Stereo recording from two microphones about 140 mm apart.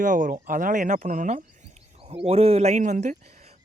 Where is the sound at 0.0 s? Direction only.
70° right (ahead or behind).